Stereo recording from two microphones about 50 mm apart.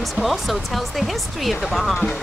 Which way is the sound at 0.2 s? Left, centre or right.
Centre.